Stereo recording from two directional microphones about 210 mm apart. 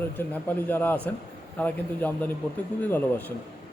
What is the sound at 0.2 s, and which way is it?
Speech, 10° left (ahead or behind).